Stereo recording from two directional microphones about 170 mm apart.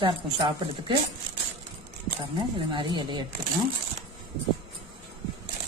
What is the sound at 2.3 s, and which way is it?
Speech, 30° right (ahead or behind).